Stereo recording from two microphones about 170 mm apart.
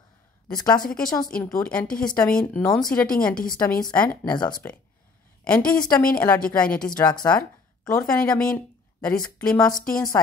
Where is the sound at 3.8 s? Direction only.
5° left (ahead or behind).